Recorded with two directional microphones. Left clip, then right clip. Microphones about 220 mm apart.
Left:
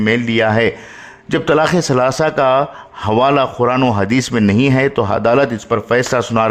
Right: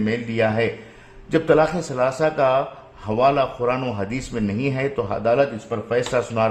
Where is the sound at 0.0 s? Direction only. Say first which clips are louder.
Left 7 dB; 40° left (ahead or behind).